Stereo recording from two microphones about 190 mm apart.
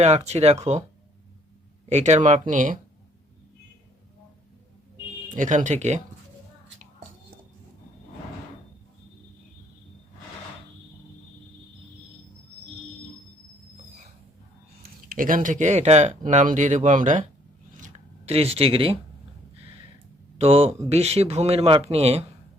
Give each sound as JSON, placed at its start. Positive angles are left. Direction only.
{"t": 0.0, "sound": "speech", "side_deg": -35}
{"t": 1.9, "sound": "speech", "side_deg": -35}
{"t": 5.3, "sound": "speech", "side_deg": -40}
{"t": 15.1, "sound": "speech", "side_deg": -45}
{"t": 17.7, "sound": "a sound", "side_deg": -40}
{"t": 20.4, "sound": "speech", "side_deg": -30}